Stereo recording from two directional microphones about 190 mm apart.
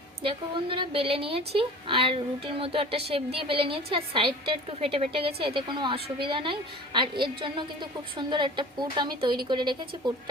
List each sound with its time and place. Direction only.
0.2 s speech: 25° right (ahead or behind)